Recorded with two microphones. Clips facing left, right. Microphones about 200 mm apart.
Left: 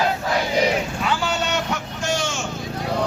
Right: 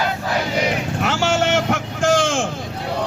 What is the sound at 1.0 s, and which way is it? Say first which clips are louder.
Vehicle: right 4 dB; 80° right.